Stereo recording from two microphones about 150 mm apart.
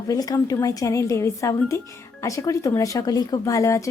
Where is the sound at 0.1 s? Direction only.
25° left (ahead or behind).